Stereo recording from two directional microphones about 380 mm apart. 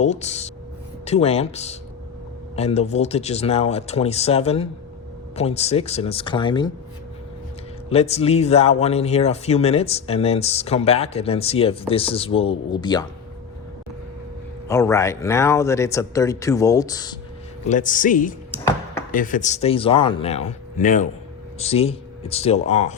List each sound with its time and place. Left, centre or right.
0.0 s speech: centre
7.9 s speech: centre
14.7 s speech: centre
18.5 s a sound: centre
19.1 s speech: left